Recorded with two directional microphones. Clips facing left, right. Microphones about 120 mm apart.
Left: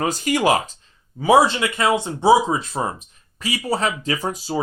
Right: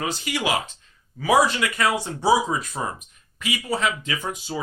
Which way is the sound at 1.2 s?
25° left (ahead or behind).